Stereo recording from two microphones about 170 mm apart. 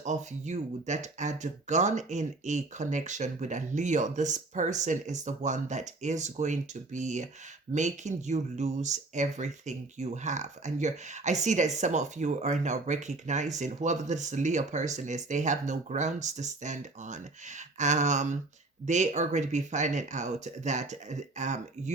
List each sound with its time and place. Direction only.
0.0 s speech: 45° right (ahead or behind)